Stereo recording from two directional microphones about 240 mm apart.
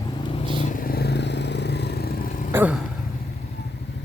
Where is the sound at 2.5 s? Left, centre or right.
Centre.